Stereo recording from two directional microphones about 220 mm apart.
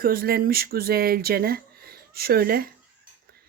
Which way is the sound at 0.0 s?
40° right (ahead or behind).